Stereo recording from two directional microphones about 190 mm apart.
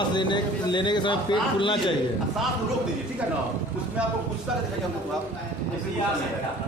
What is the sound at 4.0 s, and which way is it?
Speech, 5° right (ahead or behind).